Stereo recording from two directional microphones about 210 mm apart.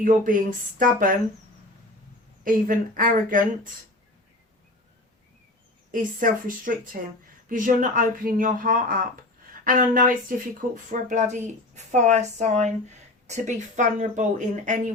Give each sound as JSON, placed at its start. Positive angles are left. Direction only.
{"t": 0.0, "sound": "speech", "side_deg": -40}
{"t": 2.4, "sound": "speech", "side_deg": -40}
{"t": 5.9, "sound": "speech", "side_deg": -40}